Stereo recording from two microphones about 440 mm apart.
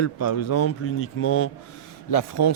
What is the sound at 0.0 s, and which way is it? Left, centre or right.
Speech, left.